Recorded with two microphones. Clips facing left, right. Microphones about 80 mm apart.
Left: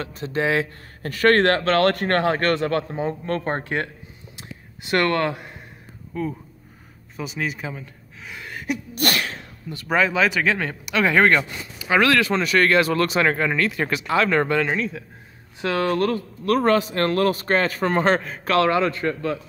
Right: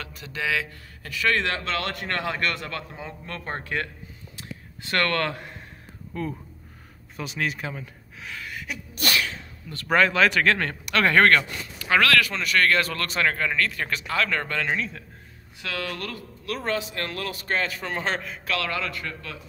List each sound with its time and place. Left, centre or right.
0.0 s speech: left
4.4 s a sound: centre
6.1 s speech: centre
8.4 s a sound: left
8.9 s sneeze: left
9.8 s speech: centre; by 14.6 s left
14.6 s speech: centre
15.6 s speech: left
16.5 s a man's voice: left
18.6 s a man's voice: left